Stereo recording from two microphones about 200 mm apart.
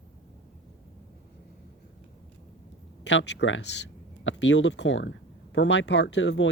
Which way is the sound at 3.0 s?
60° left (ahead or behind).